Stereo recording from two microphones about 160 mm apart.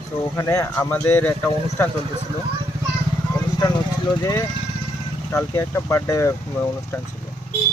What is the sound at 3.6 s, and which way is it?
Speech, 20° left (ahead or behind).